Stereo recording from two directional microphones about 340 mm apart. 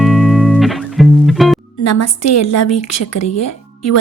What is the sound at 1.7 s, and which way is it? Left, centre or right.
A woman's voice, left.